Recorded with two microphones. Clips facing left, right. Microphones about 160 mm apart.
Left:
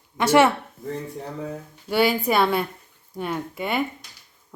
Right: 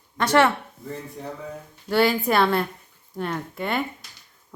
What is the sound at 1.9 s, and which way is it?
A woman's voice, 5° left (ahead or behind).